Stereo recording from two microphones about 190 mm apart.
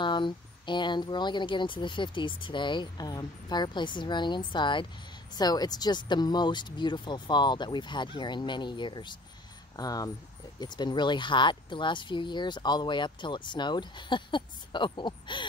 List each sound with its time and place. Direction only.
0.0 s speech: 25° left (ahead or behind)